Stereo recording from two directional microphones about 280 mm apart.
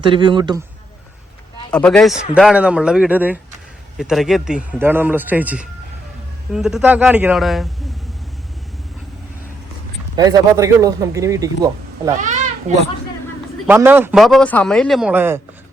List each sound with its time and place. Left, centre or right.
0.0 s speech: centre
1.7 s a man's voice: centre
10.2 s speech: centre
12.2 s a sound: right
13.7 s a man's voice: centre